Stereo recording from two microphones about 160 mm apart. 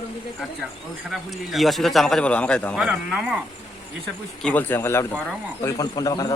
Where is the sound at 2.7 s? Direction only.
5° right (ahead or behind).